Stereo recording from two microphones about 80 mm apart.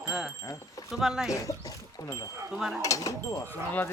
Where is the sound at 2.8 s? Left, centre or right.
Left.